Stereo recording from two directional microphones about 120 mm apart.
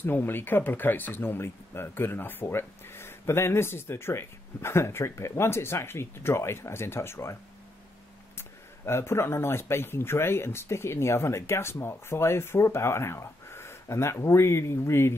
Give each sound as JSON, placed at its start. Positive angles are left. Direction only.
{"t": 0.0, "sound": "speech", "side_deg": 15}
{"t": 8.4, "sound": "speech", "side_deg": 20}